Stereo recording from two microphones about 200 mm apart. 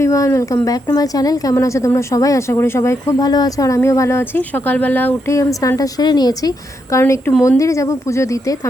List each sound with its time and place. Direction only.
0.0 s a woman's voice: 15° left (ahead or behind)